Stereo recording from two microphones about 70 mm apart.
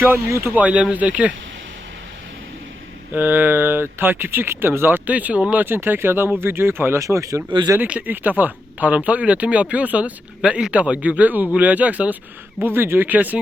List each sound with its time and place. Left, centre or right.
0.3 s speech: right
0.5 s speech: centre
3.1 s speech: right
7.0 s speech: right
7.8 s speech: right
12.6 s speech: right